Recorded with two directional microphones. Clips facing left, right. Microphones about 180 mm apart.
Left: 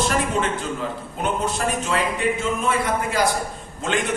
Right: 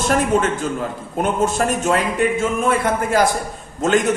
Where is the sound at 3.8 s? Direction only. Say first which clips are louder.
Right 8 dB; 45° right (ahead or behind).